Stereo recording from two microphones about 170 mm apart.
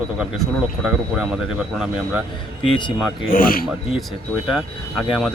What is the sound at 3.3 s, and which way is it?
Speech, 60° left (ahead or behind).